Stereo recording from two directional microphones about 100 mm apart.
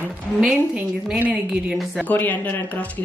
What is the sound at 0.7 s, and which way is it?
A woman's voice, 10° right (ahead or behind).